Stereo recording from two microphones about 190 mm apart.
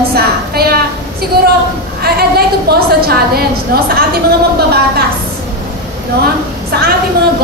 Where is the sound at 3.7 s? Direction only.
55° right (ahead or behind).